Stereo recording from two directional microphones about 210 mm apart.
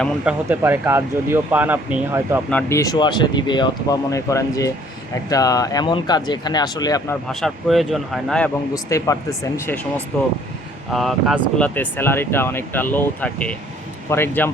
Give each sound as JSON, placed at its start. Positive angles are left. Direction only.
{"t": 0.4, "sound": "speech", "side_deg": -10}
{"t": 2.5, "sound": "speech", "side_deg": 10}
{"t": 7.3, "sound": "speech", "side_deg": 0}
{"t": 8.7, "sound": "speech", "side_deg": 15}